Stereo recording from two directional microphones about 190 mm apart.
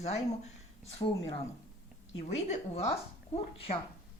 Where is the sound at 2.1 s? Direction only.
35° left (ahead or behind).